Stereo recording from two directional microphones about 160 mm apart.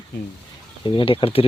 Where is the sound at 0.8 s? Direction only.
30° left (ahead or behind).